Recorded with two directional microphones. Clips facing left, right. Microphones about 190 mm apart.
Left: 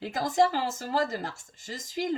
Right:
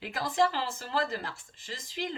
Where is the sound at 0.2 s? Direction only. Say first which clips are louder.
Left 3 dB; 45° left (ahead or behind).